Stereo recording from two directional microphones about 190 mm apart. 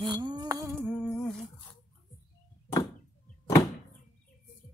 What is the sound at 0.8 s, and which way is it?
Humming, 5° left (ahead or behind).